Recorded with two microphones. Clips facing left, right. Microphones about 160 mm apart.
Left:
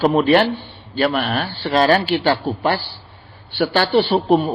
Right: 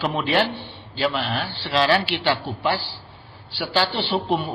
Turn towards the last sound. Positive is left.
turn(degrees=45)  # may be behind; listen again after turning